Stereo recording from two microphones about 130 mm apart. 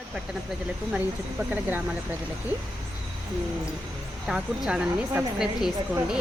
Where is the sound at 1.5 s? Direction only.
15° right (ahead or behind).